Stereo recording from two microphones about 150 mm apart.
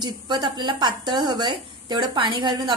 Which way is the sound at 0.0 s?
30° right (ahead or behind).